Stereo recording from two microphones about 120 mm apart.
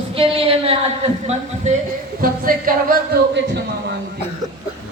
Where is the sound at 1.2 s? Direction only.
75° right (ahead or behind).